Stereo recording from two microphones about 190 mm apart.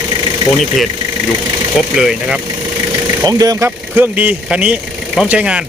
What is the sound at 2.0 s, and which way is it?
Speech, 5° right (ahead or behind).